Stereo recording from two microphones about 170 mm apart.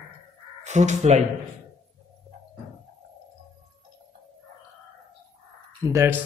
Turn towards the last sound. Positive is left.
turn(degrees=-20)  # may be behind; listen again after turning